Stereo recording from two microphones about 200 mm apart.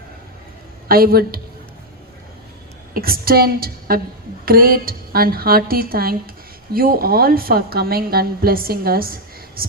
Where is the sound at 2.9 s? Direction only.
50° right (ahead or behind).